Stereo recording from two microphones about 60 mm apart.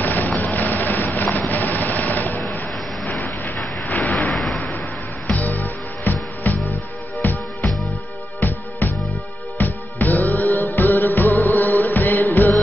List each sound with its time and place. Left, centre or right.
0.0 s vehicle: left
4.3 s a sound: centre
4.6 s basketball bounce: left
5.5 s music: left